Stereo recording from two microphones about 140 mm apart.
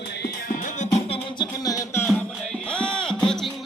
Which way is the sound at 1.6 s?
25° left (ahead or behind).